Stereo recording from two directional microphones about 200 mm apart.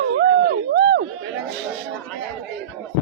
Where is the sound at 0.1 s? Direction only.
55° right (ahead or behind).